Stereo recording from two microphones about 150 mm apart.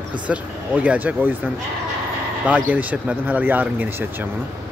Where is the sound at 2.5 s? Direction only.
10° right (ahead or behind).